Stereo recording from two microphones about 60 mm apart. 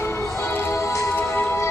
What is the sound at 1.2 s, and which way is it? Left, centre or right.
Music, left.